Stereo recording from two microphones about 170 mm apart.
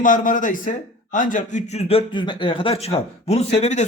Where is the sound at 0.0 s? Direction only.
50° left (ahead or behind).